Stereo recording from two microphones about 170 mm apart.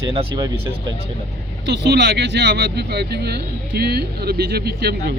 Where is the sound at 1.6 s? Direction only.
85° right; by 5.1 s 70° right (ahead or behind).